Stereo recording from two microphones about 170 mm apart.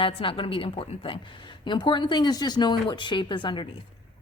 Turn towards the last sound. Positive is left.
turn(degrees=25)  # may be behind; listen again after turning